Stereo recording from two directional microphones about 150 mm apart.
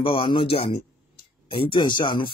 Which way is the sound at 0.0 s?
35° left (ahead or behind).